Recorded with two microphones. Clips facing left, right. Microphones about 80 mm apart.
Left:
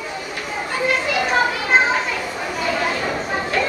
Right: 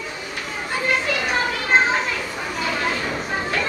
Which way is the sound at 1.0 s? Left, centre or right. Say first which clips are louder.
Left 4 dB; centre.